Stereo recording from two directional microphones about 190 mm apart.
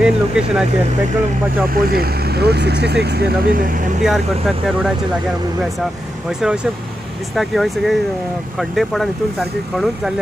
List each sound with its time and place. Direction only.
0.0 s speech: 5° right (ahead or behind)
1.7 s speech: 50° right (ahead or behind)
4.0 s speech: centre (ahead or behind)
6.4 s speech: 5° right (ahead or behind)